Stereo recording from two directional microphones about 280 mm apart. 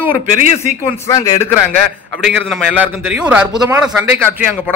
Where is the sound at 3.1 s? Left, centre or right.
Centre.